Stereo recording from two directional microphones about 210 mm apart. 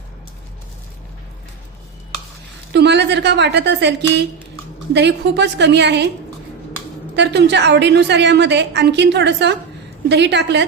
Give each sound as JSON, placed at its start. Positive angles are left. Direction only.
{"t": 2.7, "sound": "a woman's voice", "side_deg": -55}
{"t": 7.2, "sound": "a woman's voice", "side_deg": -55}